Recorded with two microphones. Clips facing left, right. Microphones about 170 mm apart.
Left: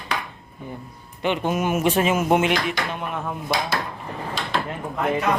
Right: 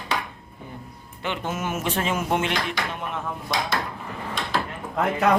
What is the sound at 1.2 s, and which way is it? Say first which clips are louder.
Speech: left 6 dB; 15° left (ahead or behind).